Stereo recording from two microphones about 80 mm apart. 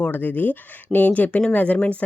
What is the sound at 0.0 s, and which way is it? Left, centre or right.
Speech, left.